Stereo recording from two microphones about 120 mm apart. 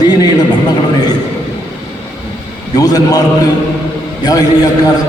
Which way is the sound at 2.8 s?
30° left (ahead or behind).